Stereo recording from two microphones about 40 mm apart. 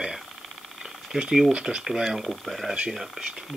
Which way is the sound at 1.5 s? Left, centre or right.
Centre.